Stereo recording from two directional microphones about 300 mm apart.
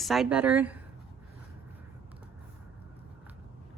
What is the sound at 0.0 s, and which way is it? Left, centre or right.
Speech, centre.